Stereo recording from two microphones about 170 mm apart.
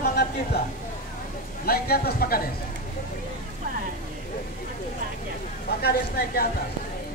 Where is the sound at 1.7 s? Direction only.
65° left (ahead or behind).